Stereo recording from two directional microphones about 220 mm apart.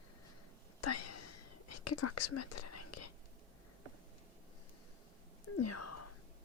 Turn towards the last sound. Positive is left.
turn(degrees=90)